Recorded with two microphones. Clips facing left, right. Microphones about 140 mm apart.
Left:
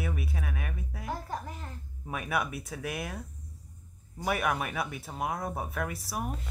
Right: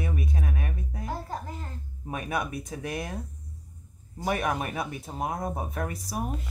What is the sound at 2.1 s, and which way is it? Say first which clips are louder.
Speech: right 1 dB; 40° right (ahead or behind).